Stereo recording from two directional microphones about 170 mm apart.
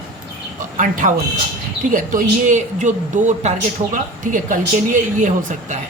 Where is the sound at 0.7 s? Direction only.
50° right (ahead or behind).